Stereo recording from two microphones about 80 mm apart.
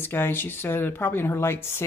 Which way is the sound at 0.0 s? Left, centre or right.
Left.